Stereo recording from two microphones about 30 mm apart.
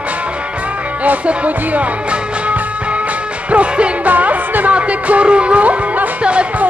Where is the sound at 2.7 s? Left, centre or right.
Right.